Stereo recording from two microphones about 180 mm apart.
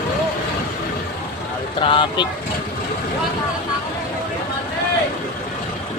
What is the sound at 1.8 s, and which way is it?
Speech, 25° left (ahead or behind).